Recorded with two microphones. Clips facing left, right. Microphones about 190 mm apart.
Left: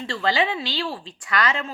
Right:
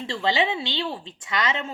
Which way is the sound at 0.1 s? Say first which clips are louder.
Left 1 dB; 25° right (ahead or behind).